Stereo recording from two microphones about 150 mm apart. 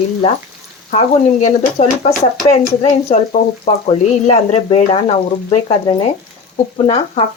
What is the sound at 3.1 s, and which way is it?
Speech, 50° left (ahead or behind).